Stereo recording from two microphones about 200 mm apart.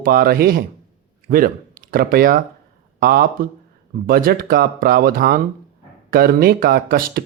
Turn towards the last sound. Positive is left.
turn(degrees=-50)  # may be behind; listen again after turning